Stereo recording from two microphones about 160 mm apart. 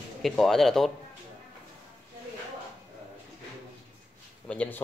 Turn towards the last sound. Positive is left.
turn(degrees=10)  # may be behind; listen again after turning